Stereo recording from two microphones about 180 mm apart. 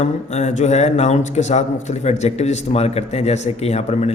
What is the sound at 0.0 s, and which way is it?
Speech, 40° left (ahead or behind).